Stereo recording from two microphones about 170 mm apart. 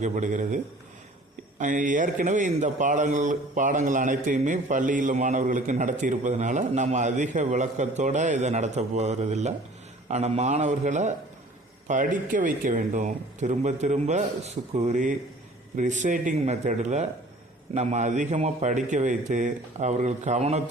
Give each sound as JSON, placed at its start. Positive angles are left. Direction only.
{"t": 0.0, "sound": "a man's voice", "side_deg": -45}